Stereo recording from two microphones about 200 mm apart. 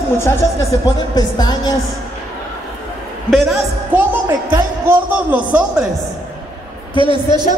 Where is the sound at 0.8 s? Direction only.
20° left (ahead or behind).